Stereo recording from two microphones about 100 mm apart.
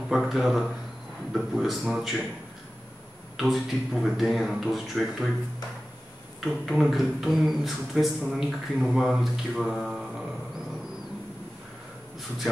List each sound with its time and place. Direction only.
0.1 s a man's voice: centre (ahead or behind)
3.3 s a man's voice: centre (ahead or behind)
6.4 s a man's voice: centre (ahead or behind)